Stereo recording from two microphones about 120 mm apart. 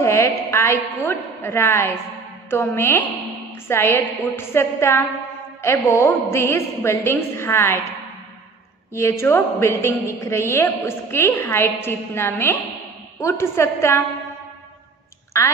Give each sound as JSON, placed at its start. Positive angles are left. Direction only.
{"t": 0.0, "sound": "a woman's voice", "side_deg": 20}
{"t": 8.9, "sound": "a woman's voice", "side_deg": 20}
{"t": 15.3, "sound": "a woman's voice", "side_deg": 25}